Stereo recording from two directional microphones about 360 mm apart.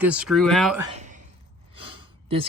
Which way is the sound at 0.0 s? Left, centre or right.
Centre.